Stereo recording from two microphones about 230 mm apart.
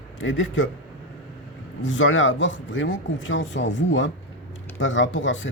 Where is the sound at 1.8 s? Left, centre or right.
Left.